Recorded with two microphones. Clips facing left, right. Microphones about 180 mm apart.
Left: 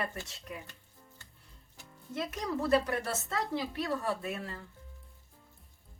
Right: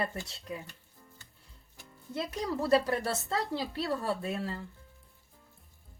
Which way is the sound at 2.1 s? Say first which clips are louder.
Right 1 dB; 30° right (ahead or behind).